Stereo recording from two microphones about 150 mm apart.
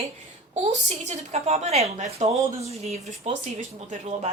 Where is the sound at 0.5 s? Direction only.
50° right (ahead or behind).